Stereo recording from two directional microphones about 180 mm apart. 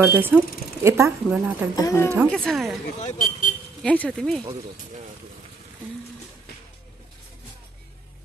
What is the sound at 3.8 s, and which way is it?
Speech, 5° left (ahead or behind).